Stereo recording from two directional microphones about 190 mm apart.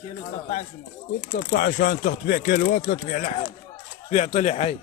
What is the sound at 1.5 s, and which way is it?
Speech, 50° left (ahead or behind).